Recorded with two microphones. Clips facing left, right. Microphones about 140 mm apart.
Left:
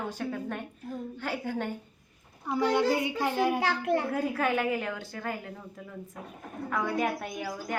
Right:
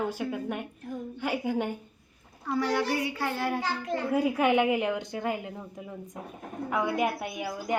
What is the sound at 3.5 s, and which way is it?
Speech, 70° left (ahead or behind).